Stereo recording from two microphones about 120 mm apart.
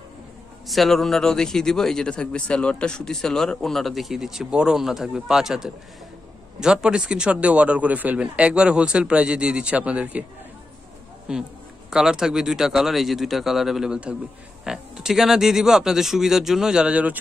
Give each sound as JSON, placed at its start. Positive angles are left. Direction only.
{"t": 0.7, "sound": "speech", "side_deg": 0}
{"t": 11.3, "sound": "speech", "side_deg": -5}